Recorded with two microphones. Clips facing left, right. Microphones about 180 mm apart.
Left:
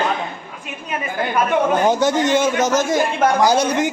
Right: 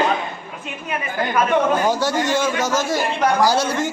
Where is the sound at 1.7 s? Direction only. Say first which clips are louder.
Left 3 dB; 20° left (ahead or behind).